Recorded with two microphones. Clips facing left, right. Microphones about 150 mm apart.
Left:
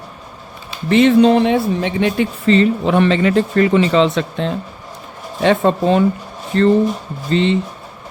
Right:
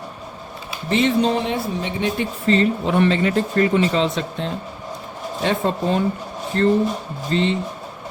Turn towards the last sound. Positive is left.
turn(degrees=90)